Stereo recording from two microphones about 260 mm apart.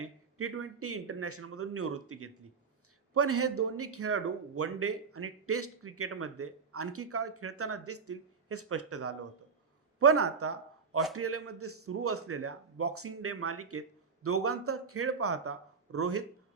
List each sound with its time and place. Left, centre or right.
0.0 s speech: right